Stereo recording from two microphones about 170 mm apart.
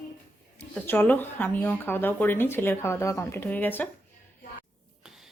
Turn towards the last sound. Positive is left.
turn(degrees=10)  # may be behind; listen again after turning